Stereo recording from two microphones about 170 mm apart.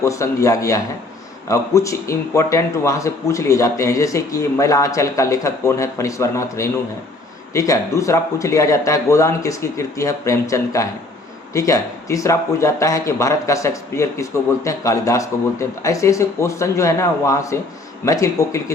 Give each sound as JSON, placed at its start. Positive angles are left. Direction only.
{"t": 0.0, "sound": "a man's voice", "side_deg": 20}